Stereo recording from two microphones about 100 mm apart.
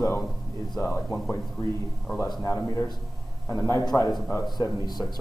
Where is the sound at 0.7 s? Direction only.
25° left (ahead or behind).